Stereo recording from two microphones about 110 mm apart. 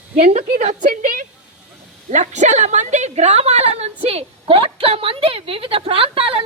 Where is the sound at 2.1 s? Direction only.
90° right.